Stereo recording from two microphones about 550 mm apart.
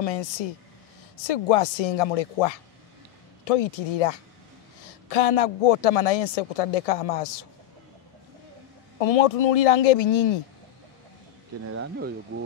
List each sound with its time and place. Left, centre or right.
0.0 s speech: left
9.0 s speech: left
11.6 s speech: right